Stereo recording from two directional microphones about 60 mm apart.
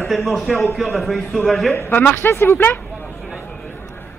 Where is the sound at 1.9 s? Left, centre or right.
Left.